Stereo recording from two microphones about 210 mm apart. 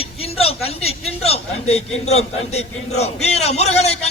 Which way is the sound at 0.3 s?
30° left (ahead or behind).